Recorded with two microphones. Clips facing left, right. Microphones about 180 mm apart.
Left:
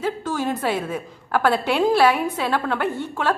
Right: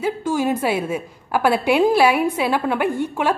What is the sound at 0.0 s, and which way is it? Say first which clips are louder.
A woman's voice: right 4 dB; 10° right (ahead or behind).